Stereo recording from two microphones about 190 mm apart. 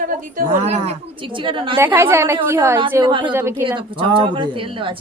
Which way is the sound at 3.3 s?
10° right (ahead or behind).